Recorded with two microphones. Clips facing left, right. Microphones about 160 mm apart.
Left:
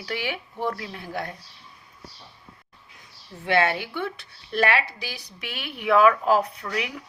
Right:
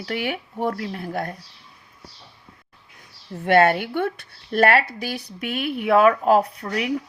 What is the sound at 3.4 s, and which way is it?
Speech, 50° right (ahead or behind).